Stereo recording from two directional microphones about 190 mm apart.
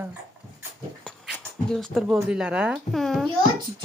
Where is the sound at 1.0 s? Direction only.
5° left (ahead or behind).